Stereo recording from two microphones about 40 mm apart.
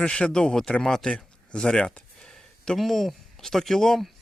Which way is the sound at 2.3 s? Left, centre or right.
Centre.